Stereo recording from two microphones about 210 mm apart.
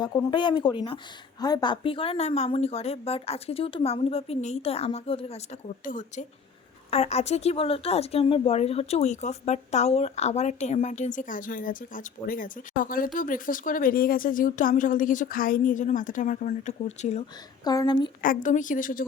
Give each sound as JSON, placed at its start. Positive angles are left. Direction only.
{"t": 0.0, "sound": "a woman's voice", "side_deg": 20}
{"t": 17.6, "sound": "a woman's voice", "side_deg": 20}
{"t": 18.2, "sound": "speech", "side_deg": 40}